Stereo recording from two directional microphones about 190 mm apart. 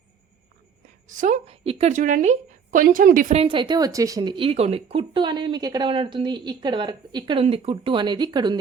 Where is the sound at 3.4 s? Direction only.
25° right (ahead or behind).